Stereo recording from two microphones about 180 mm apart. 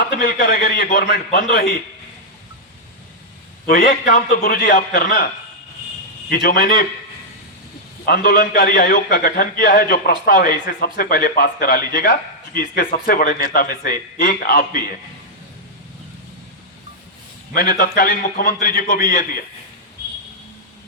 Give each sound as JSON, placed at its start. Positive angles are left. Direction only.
{"t": 0.0, "sound": "a man's voice", "side_deg": 60}
{"t": 3.7, "sound": "a man's voice", "side_deg": 55}
{"t": 6.3, "sound": "a man's voice", "side_deg": 55}
{"t": 8.0, "sound": "a man's voice", "side_deg": 60}
{"t": 17.5, "sound": "a man's voice", "side_deg": 55}